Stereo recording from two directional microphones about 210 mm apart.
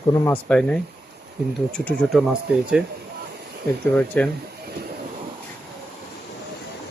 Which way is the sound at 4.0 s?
5° left (ahead or behind).